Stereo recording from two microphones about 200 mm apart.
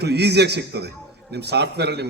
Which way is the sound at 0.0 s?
55° right (ahead or behind).